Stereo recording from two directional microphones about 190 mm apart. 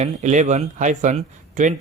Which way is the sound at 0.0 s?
40° right (ahead or behind).